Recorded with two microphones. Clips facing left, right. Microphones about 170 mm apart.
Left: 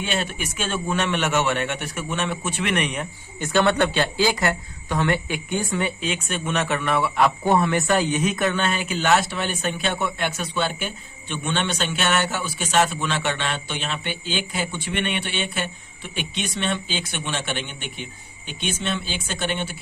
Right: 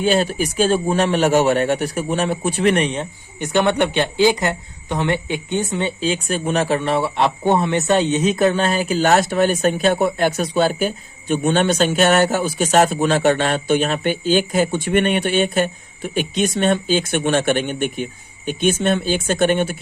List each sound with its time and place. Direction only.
0.0 s speech: 35° right (ahead or behind)
3.4 s speech: 15° right (ahead or behind); by 19.7 s 50° right (ahead or behind)